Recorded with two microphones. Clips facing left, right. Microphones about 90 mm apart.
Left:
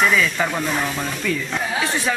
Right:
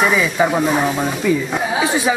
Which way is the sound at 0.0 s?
10° right (ahead or behind).